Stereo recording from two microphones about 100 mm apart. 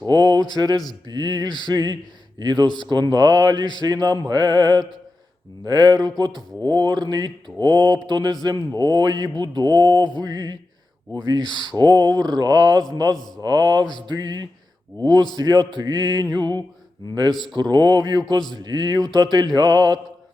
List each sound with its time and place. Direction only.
0.0 s a sound: 40° right (ahead or behind)
0.5 s speech: 45° right (ahead or behind)
17.3 s a man's voice: centre (ahead or behind)
17.6 s speech: 45° right (ahead or behind)